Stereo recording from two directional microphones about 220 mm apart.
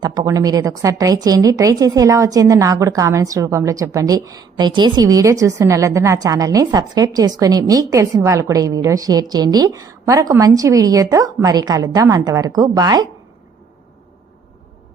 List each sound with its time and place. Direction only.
0.0 s a woman's voice: 15° right (ahead or behind)